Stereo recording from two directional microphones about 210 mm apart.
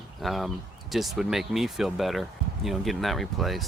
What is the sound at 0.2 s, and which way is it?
Speech, centre (ahead or behind).